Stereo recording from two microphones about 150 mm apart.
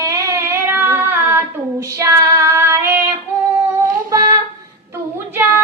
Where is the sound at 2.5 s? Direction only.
20° right (ahead or behind).